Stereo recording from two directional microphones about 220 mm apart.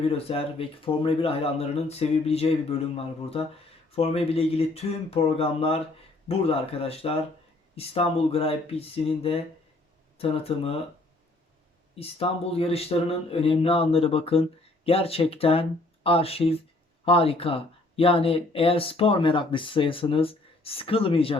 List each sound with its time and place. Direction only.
0.2 s speech: 25° left (ahead or behind)
11.9 s speech: 25° left (ahead or behind)